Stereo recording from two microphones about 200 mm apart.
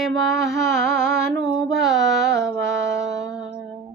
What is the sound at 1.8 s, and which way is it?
Carnatic music, centre (ahead or behind).